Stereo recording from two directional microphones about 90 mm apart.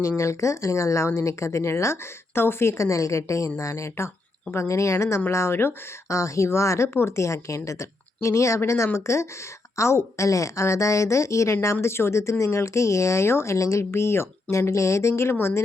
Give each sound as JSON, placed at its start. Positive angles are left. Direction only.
{"t": 0.2, "sound": "a woman's voice", "side_deg": 35}